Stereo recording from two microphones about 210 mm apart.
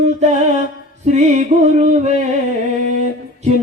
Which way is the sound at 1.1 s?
35° right (ahead or behind).